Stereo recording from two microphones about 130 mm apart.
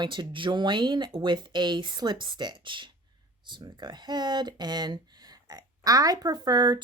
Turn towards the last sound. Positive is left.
turn(degrees=-35)  # may be behind; listen again after turning